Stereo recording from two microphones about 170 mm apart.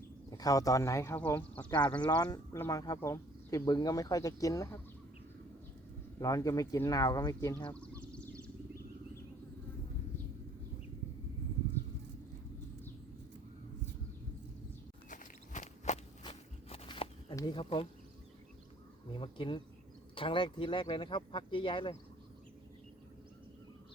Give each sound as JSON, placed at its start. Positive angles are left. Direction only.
{"t": 0.3, "sound": "speech", "side_deg": 20}
{"t": 2.0, "sound": "speech", "side_deg": 25}
{"t": 6.1, "sound": "speech", "side_deg": 20}
{"t": 7.8, "sound": "a sound", "side_deg": 5}
{"t": 15.1, "sound": "walk", "side_deg": 45}
{"t": 16.3, "sound": "a sound", "side_deg": 35}
{"t": 17.3, "sound": "speech", "side_deg": 25}
{"t": 19.1, "sound": "speech", "side_deg": 30}